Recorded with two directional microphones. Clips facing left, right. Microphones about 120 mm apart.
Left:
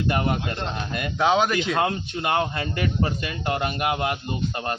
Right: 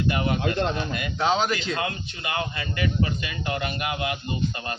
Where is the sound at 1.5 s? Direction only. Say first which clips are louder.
Left 6 dB; 55° left (ahead or behind).